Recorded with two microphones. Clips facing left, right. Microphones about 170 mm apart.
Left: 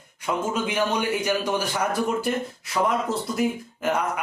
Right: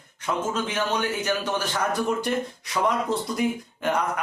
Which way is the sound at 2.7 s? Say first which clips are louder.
Left 1 dB; centre (ahead or behind).